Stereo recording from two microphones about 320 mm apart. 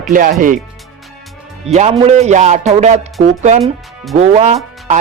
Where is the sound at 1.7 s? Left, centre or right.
Centre.